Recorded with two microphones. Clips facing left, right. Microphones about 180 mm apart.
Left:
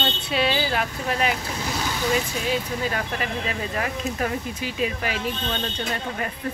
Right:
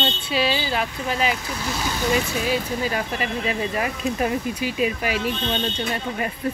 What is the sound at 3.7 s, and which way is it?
Speech, 15° right (ahead or behind).